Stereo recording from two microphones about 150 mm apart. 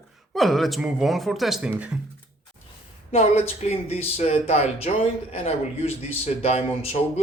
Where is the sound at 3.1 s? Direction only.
45° left (ahead or behind).